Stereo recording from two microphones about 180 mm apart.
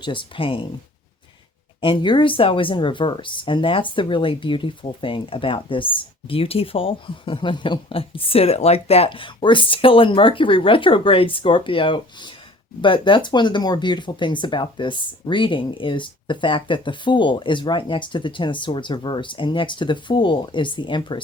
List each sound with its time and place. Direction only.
0.0 s speech: 30° left (ahead or behind)
1.8 s speech: 25° left (ahead or behind)